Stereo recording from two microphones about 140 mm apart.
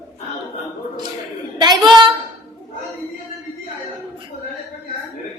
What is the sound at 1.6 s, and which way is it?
Speech, 30° right (ahead or behind).